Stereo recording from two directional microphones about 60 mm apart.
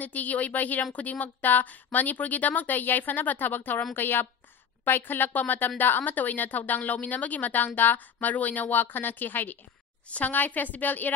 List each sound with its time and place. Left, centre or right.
0.0 s a woman's voice: left